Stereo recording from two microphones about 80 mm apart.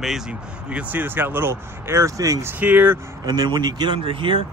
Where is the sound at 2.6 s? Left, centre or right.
Right.